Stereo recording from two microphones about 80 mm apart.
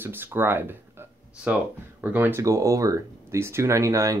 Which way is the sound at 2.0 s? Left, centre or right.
Right.